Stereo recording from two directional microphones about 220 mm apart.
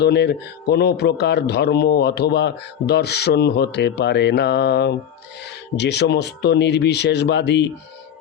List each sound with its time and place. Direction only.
0.0 s a man's voice: 50° left (ahead or behind)